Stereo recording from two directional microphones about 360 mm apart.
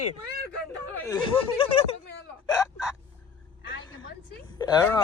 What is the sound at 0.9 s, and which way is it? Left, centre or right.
Speech, centre.